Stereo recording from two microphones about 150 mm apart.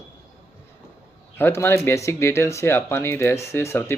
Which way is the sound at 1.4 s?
15° left (ahead or behind).